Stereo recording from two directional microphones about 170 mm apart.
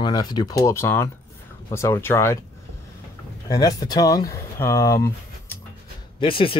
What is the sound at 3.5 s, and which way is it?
Speech, 20° left (ahead or behind).